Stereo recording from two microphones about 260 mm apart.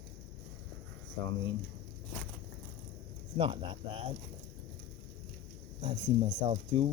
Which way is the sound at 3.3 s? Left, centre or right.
Right.